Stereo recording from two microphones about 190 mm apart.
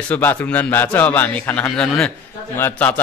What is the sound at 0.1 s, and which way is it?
A man's voice, 10° left (ahead or behind).